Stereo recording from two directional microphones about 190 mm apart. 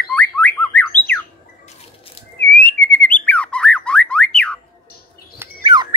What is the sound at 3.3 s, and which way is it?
Squawk, 5° left (ahead or behind).